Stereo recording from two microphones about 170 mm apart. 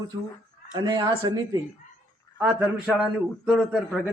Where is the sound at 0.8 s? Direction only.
25° right (ahead or behind).